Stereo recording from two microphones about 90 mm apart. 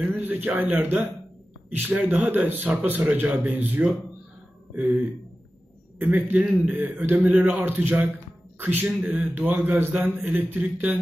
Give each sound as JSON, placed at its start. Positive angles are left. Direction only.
{"t": 0.1, "sound": "a sound", "side_deg": -20}
{"t": 0.7, "sound": "a man's voice", "side_deg": -20}
{"t": 5.9, "sound": "a man's voice", "side_deg": -20}